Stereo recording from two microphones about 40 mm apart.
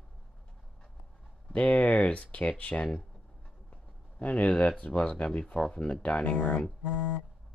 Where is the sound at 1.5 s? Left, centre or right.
Left.